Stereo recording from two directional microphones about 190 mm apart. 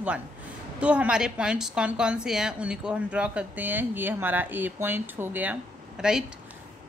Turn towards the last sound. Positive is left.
turn(degrees=-5)  # may be behind; listen again after turning